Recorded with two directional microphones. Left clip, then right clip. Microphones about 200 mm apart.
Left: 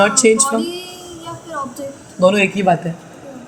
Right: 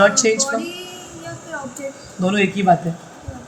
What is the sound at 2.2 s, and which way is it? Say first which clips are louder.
Speech: left 6 dB; 15° left (ahead or behind).